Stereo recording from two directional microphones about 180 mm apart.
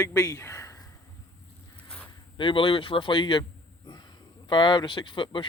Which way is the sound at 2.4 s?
30° left (ahead or behind).